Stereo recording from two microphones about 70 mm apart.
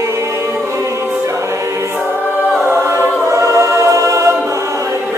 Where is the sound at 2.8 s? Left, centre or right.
Right.